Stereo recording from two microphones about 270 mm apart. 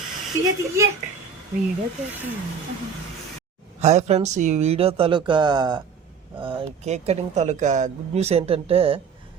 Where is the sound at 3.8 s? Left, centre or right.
Right.